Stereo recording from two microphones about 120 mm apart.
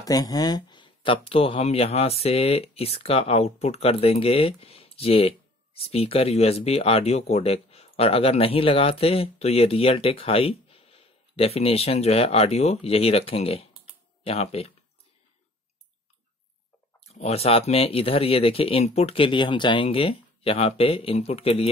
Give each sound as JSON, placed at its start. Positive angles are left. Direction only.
{"t": 0.0, "sound": "speech", "side_deg": 30}
{"t": 17.0, "sound": "speech", "side_deg": 60}